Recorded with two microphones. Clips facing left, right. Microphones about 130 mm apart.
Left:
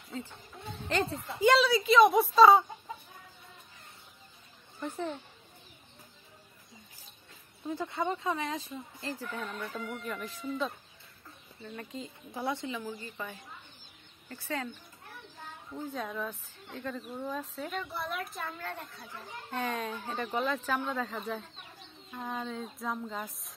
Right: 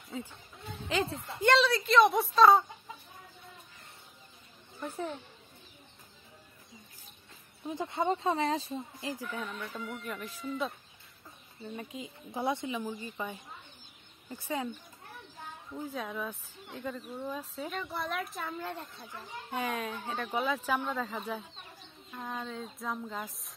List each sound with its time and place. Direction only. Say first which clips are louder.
0.1 s a woman's voice: even; 5° right (ahead or behind)
4.7 s a woman's voice: left 1 dB; 5° right (ahead or behind)
7.6 s speech: right 2 dB; 15° right (ahead or behind)
9.0 s speech: left 3 dB; 15° right (ahead or behind)
9.8 s a woman's voice: left 1 dB; centre (ahead or behind)
11.6 s speech: right 1 dB; 10° right (ahead or behind)
12.3 s a woman's voice: right 2 dB; 20° right (ahead or behind); by 18.5 s centre (ahead or behind)
18.6 s speech: right 1 dB; 20° right (ahead or behind)
19.5 s a woman's voice: even; 5° right (ahead or behind)